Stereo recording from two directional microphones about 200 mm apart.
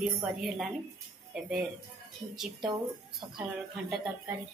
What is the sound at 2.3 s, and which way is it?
Speech, centre (ahead or behind).